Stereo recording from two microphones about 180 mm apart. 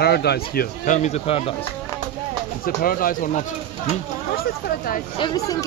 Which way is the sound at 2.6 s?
55° left (ahead or behind).